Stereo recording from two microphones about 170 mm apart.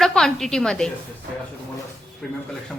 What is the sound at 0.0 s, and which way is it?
Speech, 5° left (ahead or behind).